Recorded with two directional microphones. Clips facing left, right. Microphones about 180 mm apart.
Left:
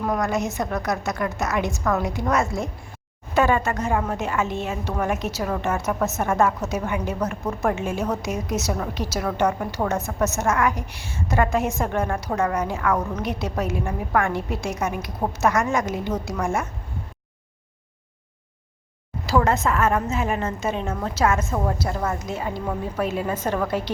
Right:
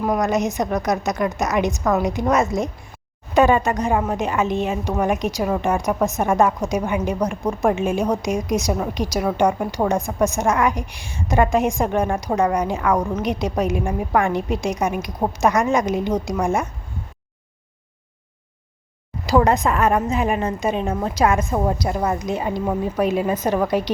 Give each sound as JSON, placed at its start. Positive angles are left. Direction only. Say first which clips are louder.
{"t": 0.0, "sound": "a woman's voice", "louder": "right 4 dB", "side_deg": -20}
{"t": 19.2, "sound": "a woman's voice", "louder": "right 4 dB", "side_deg": -15}